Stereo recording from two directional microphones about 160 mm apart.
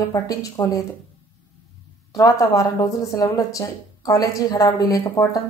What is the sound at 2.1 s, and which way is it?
A woman's voice, 20° left (ahead or behind).